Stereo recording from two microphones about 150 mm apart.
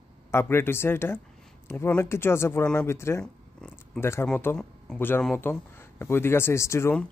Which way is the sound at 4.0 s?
15° left (ahead or behind).